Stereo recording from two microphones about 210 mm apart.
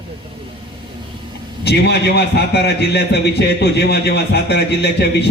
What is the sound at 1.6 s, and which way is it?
A man's voice, 50° left (ahead or behind).